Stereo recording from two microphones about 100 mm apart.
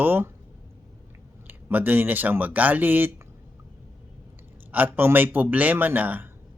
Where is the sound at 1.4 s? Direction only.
20° right (ahead or behind).